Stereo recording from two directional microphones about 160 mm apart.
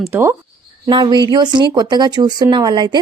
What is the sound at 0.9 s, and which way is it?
Speech, 30° right (ahead or behind).